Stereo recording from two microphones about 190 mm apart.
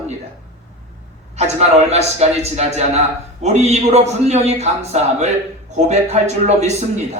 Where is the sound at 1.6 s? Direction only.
35° right (ahead or behind).